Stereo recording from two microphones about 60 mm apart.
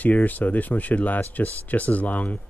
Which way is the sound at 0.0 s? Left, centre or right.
Left.